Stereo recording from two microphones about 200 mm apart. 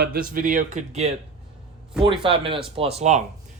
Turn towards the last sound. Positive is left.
turn(degrees=-35)  # may be behind; listen again after turning